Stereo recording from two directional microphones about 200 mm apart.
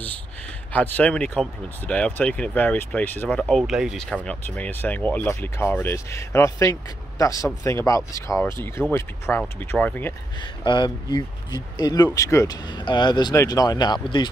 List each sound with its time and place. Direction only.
0.7 s speech: 10° left (ahead or behind)
10.4 s speech: 25° left (ahead or behind)